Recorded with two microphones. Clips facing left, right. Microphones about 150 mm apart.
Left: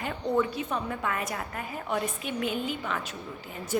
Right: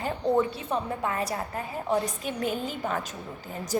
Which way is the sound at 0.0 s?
30° right (ahead or behind).